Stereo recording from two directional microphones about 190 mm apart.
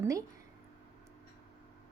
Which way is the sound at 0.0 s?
15° right (ahead or behind).